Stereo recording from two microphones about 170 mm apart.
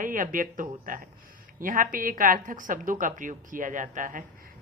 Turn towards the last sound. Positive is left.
turn(degrees=-50)  # may be behind; listen again after turning